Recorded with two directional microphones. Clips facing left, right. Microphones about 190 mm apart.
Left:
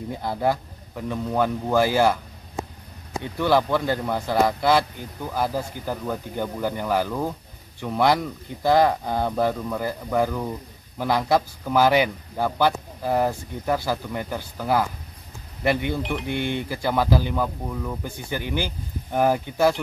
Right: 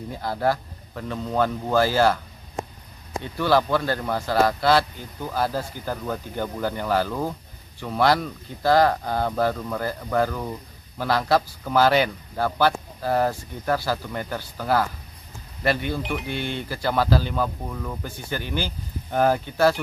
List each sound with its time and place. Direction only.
0.1 s speech: 20° left (ahead or behind)
3.3 s speech: 15° left (ahead or behind)